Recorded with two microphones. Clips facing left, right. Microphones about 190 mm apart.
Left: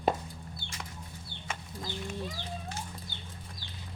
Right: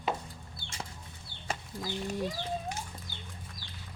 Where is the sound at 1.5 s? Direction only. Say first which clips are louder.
Right 3 dB; 35° right (ahead or behind).